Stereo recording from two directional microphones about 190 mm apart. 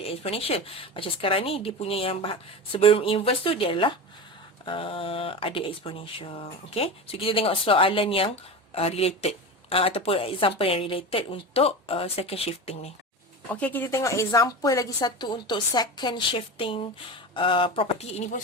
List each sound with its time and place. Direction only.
0.0 s a woman's voice: 30° left (ahead or behind)
13.5 s a woman's voice: 10° left (ahead or behind); by 18.3 s 35° left (ahead or behind)